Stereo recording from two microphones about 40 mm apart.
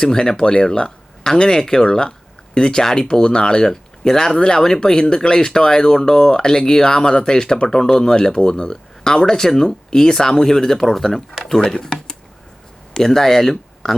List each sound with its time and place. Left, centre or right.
0.0 s speech: centre
11.4 s speech: centre